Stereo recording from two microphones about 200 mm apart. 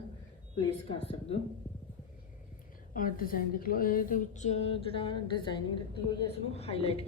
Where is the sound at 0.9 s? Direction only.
30° left (ahead or behind).